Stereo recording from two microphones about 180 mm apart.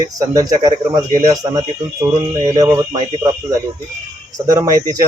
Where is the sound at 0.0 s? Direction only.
20° right (ahead or behind).